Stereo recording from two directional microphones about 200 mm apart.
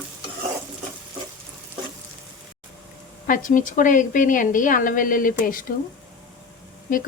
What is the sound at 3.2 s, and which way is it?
A woman's voice, 45° left (ahead or behind).